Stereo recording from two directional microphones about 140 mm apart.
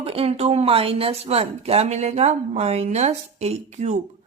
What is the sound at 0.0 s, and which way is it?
Speech, 45° right (ahead or behind).